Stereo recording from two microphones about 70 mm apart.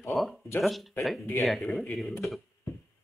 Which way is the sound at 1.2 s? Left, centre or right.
Left.